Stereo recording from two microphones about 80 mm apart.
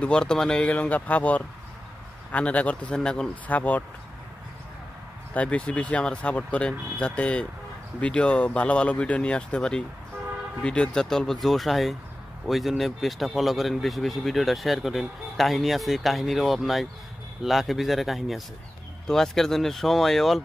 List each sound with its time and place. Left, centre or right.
0.0 s speech: centre
3.4 s speech: centre
5.3 s speech: centre